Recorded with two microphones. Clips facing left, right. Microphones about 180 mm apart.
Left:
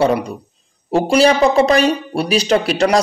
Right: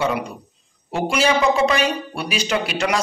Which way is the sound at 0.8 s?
35° left (ahead or behind).